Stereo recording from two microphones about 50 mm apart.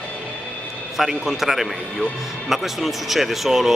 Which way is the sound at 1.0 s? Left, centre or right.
Centre.